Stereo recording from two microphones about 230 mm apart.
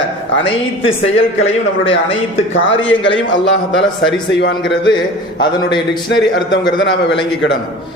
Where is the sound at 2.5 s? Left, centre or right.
Left.